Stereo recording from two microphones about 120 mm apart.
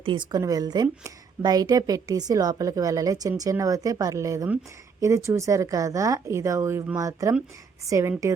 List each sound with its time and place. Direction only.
0.0 s a woman's voice: 40° right (ahead or behind); by 8.1 s 25° right (ahead or behind)